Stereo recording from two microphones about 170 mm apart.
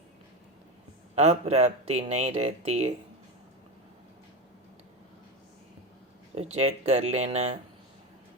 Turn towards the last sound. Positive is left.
turn(degrees=-40)  # may be behind; listen again after turning